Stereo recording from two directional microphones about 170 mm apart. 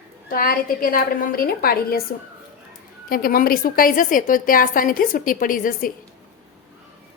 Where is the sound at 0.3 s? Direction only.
55° left (ahead or behind).